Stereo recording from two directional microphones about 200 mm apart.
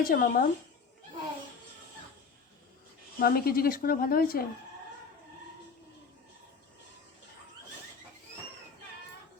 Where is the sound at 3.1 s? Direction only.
50° left (ahead or behind).